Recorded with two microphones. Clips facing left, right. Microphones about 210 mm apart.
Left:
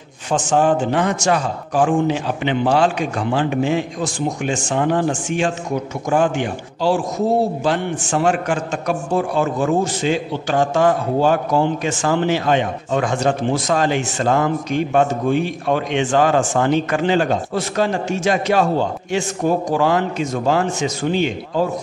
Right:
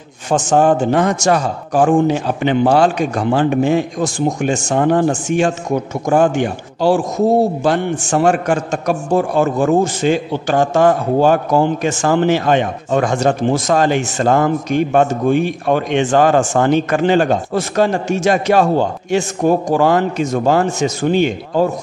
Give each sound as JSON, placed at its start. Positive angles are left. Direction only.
{"t": 0.3, "sound": "a man's voice", "side_deg": -45}